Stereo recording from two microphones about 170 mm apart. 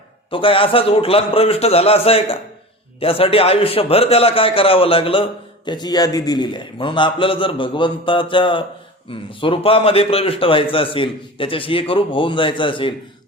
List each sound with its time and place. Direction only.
0.3 s a man's voice: 30° left (ahead or behind)